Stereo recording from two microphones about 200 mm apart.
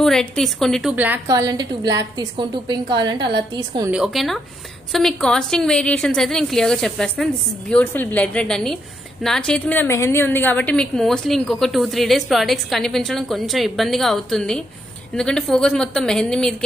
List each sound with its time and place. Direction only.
0.0 s a woman's voice: centre (ahead or behind); by 3.9 s 20° right (ahead or behind)
3.9 s a woman's voice: centre (ahead or behind)